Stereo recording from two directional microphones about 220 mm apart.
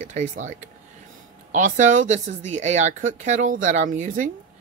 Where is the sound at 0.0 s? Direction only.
35° right (ahead or behind).